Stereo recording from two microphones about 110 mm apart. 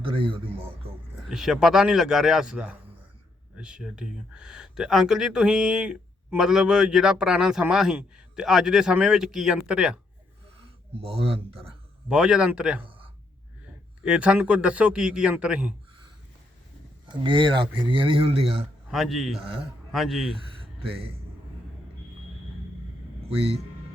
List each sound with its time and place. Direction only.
0.0 s speech: 50° right (ahead or behind)
1.3 s a man's voice: 5° right (ahead or behind)
10.9 s speech: 60° right (ahead or behind)
12.0 s speech: 10° right (ahead or behind)
14.0 s speech: 10° right (ahead or behind)
17.2 s speech: 50° right (ahead or behind)
18.9 s a man's voice: centre (ahead or behind)